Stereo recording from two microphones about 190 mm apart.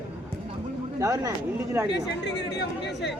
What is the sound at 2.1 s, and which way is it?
Speech, 65° left (ahead or behind).